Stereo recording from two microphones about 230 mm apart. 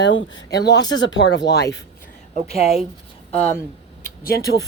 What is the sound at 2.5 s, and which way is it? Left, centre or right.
Speech, left.